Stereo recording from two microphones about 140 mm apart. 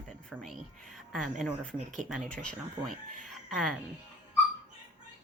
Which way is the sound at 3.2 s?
Centre (ahead or behind).